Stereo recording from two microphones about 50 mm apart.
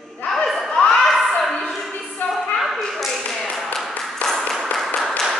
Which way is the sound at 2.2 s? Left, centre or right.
Left.